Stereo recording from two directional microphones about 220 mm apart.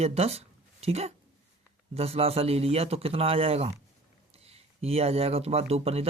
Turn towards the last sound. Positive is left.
turn(degrees=-25)  # may be behind; listen again after turning